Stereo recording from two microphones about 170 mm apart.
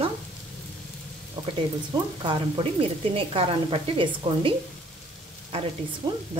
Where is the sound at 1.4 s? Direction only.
25° right (ahead or behind).